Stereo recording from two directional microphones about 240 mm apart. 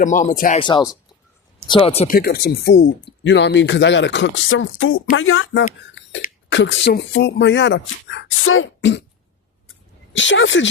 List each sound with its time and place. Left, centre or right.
0.0 s speech: left
0.6 s speech: centre
2.1 s speech: left
10.1 s speech: left